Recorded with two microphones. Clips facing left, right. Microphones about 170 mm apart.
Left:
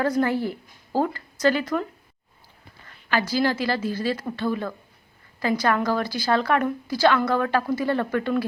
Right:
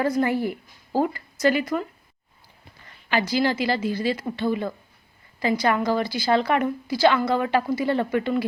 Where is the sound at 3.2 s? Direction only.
15° right (ahead or behind).